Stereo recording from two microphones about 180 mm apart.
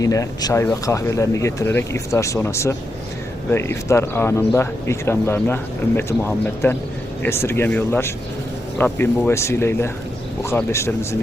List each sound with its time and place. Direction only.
0.0 s speech: 20° left (ahead or behind)